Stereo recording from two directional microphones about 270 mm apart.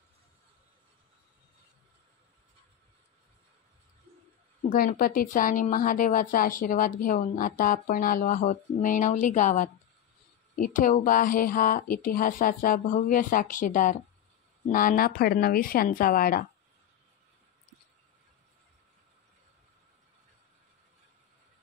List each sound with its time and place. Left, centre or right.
4.6 s a woman's voice: left